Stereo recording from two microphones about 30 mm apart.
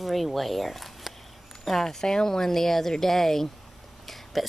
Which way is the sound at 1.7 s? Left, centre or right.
Centre.